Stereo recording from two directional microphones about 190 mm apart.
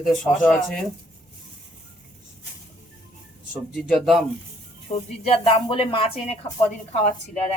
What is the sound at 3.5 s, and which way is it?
Speech, centre (ahead or behind).